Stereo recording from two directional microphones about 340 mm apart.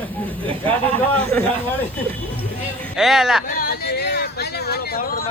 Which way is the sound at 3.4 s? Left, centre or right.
Left.